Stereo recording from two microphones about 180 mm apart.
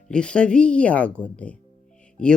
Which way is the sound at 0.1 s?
5° left (ahead or behind).